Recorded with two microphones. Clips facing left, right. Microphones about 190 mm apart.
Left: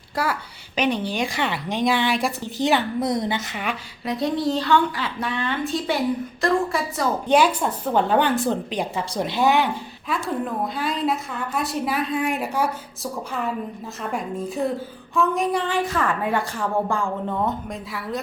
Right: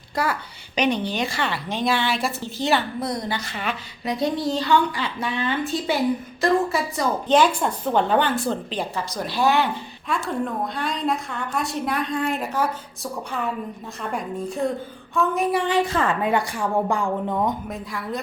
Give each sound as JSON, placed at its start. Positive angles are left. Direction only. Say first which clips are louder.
{"t": 0.2, "sound": "a woman's voice", "louder": "even", "side_deg": 10}
{"t": 4.0, "sound": "a woman's voice", "louder": "left 1 dB", "side_deg": 0}
{"t": 10.1, "sound": "a woman's voice", "louder": "even", "side_deg": 0}
{"t": 15.6, "sound": "a woman's voice", "louder": "right 2 dB", "side_deg": -20}
{"t": 17.7, "sound": "a woman's voice", "louder": "even", "side_deg": 0}